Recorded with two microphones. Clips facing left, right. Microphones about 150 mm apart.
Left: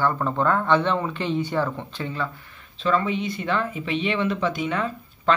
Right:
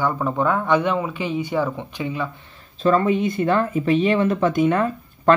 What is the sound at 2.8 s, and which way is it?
Speech, 45° right (ahead or behind).